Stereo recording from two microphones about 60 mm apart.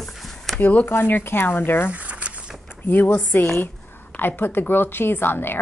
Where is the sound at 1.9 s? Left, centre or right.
Right.